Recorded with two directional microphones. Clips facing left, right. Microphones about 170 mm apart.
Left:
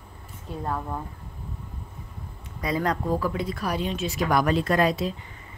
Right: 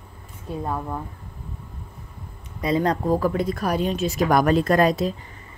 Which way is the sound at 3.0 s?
45° right (ahead or behind).